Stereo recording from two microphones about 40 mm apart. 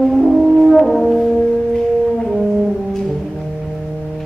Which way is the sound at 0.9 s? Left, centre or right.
Centre.